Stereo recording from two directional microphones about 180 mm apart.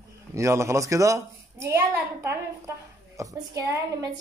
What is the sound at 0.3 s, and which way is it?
A woman's voice, 15° right (ahead or behind).